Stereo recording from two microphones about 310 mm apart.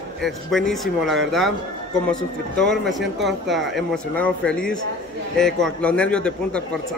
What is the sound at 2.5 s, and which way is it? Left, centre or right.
Speech, centre.